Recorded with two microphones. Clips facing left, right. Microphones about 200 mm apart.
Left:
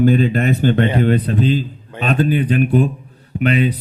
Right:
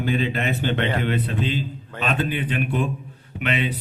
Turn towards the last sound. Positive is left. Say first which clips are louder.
# left 8 dB
turn(degrees=40)  # may be behind; listen again after turning